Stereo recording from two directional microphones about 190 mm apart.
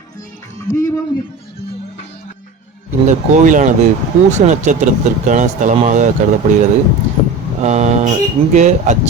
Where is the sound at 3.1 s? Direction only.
40° right (ahead or behind).